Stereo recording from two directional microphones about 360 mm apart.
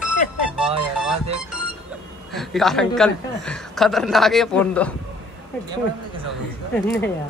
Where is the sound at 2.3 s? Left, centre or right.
Centre.